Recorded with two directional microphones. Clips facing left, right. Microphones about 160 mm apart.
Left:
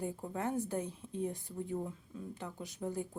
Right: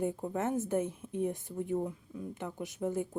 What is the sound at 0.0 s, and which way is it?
A woman's voice, 20° right (ahead or behind).